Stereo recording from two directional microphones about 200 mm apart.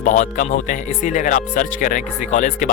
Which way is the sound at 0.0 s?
40° left (ahead or behind).